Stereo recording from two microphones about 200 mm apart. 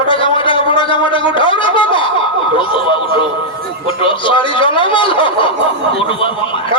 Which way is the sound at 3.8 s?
25° left (ahead or behind).